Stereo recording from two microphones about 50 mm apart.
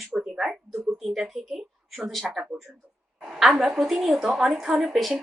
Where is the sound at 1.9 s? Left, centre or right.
Centre.